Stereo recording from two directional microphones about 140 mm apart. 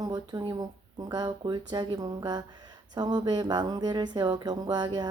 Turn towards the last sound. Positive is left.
turn(degrees=-30)  # may be behind; listen again after turning